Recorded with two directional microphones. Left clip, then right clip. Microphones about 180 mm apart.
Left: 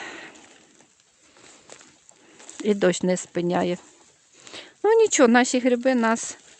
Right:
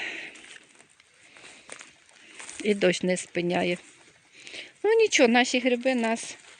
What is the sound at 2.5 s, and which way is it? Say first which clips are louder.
Speech: left 2 dB; 25° left (ahead or behind).